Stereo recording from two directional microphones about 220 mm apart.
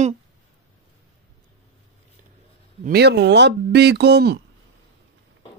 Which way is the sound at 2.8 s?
50° right (ahead or behind).